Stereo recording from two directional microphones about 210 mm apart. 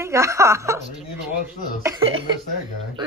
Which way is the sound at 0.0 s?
15° right (ahead or behind).